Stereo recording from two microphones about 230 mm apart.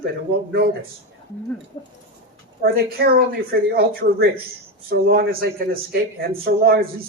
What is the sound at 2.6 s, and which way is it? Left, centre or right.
Speech, right.